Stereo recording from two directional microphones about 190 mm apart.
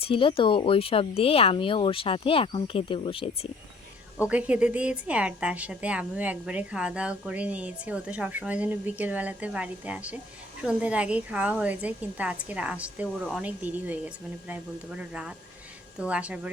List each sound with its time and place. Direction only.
0.0 s speech: 30° left (ahead or behind)
4.2 s a woman's voice: 5° right (ahead or behind)